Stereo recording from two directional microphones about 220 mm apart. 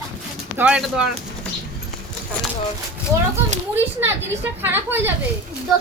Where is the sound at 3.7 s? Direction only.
10° right (ahead or behind).